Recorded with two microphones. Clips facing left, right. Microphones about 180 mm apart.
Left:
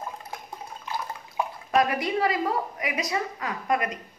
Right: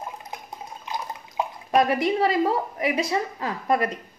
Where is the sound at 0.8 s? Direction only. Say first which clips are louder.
Right 1 dB; 20° right (ahead or behind).